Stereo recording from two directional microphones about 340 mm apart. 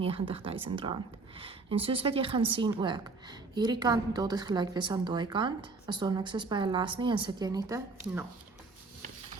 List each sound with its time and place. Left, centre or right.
0.0 s a woman's voice: centre